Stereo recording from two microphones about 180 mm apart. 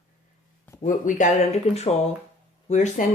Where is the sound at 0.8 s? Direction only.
45° left (ahead or behind).